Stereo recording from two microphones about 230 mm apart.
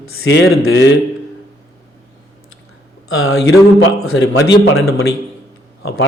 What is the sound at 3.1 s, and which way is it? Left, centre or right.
Speech, left.